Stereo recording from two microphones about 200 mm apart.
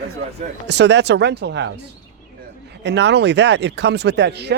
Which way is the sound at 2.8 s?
60° right (ahead or behind).